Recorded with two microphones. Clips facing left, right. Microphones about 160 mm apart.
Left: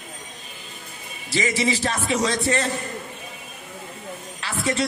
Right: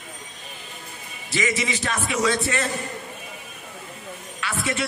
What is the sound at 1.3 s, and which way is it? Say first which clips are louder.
A man's voice: left 3 dB; 35° left (ahead or behind).